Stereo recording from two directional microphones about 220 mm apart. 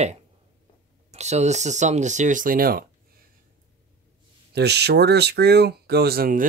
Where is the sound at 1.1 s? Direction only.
30° right (ahead or behind).